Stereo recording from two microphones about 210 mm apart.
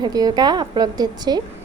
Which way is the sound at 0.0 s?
20° right (ahead or behind).